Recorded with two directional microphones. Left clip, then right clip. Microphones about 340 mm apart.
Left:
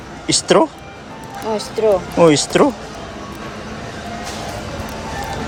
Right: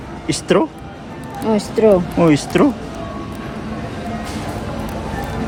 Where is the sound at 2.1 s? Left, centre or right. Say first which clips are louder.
Left 3 dB; centre.